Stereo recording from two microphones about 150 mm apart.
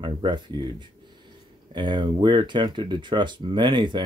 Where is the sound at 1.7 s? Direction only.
30° right (ahead or behind).